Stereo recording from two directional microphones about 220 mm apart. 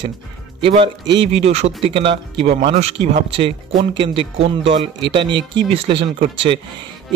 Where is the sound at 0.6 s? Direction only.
25° right (ahead or behind).